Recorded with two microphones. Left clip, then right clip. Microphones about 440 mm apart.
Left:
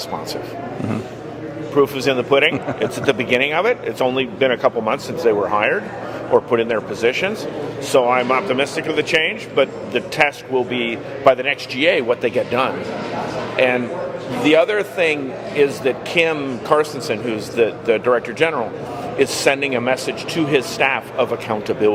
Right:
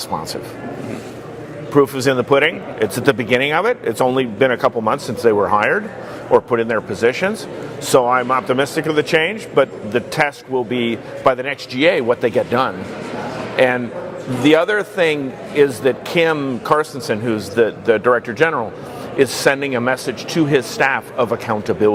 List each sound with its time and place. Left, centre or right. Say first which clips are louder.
1.7 s speech: right 2 dB; right